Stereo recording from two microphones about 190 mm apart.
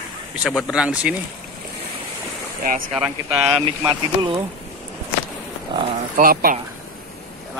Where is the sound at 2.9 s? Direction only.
5° right (ahead or behind).